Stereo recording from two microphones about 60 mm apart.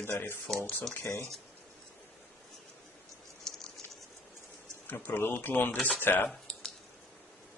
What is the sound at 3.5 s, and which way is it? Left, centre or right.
Patter, centre.